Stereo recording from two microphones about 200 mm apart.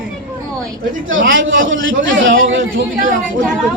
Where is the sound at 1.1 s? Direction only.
70° right (ahead or behind).